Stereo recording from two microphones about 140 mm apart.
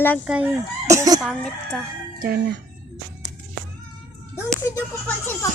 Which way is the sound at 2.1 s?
90° right.